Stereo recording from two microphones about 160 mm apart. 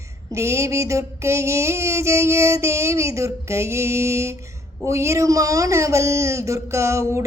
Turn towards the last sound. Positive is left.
turn(degrees=-20)  # may be behind; listen again after turning